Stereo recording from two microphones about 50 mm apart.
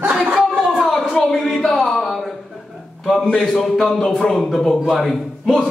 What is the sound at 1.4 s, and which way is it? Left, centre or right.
Speech, centre.